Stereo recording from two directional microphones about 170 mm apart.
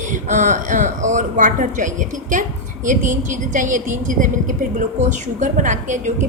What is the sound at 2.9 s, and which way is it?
A woman's voice, 50° right (ahead or behind).